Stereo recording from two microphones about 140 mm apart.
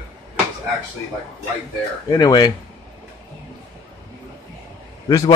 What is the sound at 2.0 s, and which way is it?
Speech, 30° left (ahead or behind).